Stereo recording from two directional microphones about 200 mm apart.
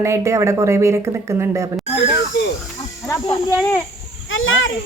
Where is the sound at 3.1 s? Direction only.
15° left (ahead or behind).